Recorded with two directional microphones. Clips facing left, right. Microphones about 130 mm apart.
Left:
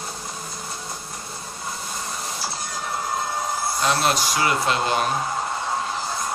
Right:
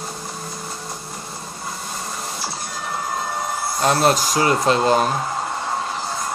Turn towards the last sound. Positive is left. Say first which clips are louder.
# right 5 dB
turn(degrees=-40)  # may be behind; listen again after turning